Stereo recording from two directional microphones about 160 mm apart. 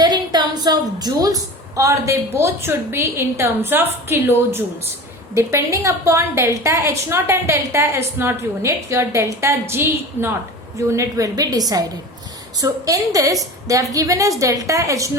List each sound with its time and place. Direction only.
0.0 s a woman's voice: 25° right (ahead or behind)